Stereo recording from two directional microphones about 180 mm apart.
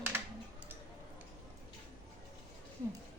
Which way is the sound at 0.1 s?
10° right (ahead or behind).